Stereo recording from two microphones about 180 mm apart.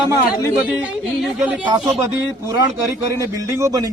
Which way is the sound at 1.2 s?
5° right (ahead or behind).